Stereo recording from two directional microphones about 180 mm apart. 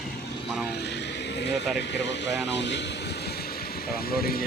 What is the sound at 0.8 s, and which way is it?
Speech, 70° left (ahead or behind).